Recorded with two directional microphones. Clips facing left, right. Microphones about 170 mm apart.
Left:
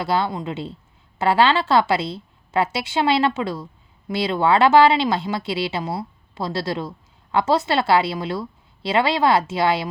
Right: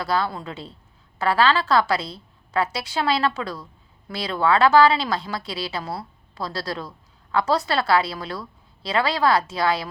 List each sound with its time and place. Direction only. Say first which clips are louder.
0.0 s speech: left 2 dB; 25° left (ahead or behind)